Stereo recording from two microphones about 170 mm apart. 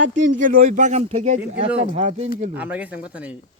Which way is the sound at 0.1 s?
50° right (ahead or behind).